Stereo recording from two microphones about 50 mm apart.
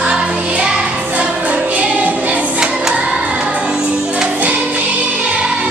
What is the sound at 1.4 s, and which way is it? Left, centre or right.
Music, right.